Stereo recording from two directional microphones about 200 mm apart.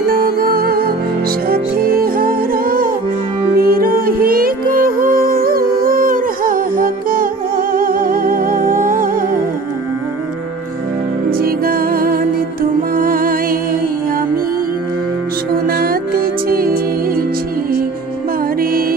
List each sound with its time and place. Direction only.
0.0 s music: 45° right (ahead or behind)
11.2 s music: 45° right (ahead or behind)
15.5 s music: 45° right (ahead or behind)
18.6 s music: 45° right (ahead or behind)